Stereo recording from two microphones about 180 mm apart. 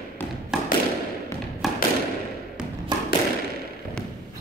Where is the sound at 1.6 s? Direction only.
Centre (ahead or behind).